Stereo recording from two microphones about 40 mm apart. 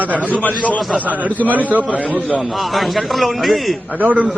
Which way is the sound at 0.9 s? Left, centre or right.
Right.